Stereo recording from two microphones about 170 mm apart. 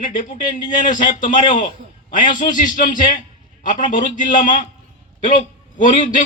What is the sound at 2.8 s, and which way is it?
A man's voice, 50° left (ahead or behind).